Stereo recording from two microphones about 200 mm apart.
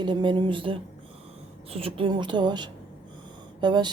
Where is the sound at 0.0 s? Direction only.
25° right (ahead or behind).